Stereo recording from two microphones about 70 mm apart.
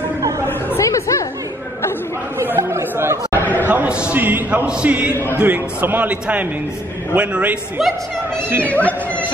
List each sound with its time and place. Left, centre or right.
0.7 s chatter: left
2.3 s chatter: right
3.6 s a sound: right
3.9 s a man's voice: centre
4.2 s a man's voice: right
5.1 s a man's voice: left
5.4 s a man's voice: right
8.7 s speech: left